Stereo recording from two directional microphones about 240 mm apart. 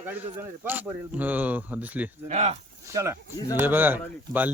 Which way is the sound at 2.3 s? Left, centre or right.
Right.